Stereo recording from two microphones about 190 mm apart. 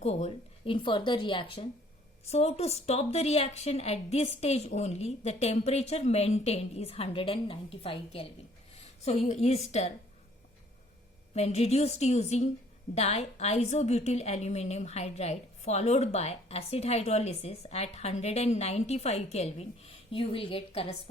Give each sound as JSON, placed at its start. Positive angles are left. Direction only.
{"t": 0.0, "sound": "a woman's voice", "side_deg": 35}
{"t": 11.3, "sound": "a woman's voice", "side_deg": 35}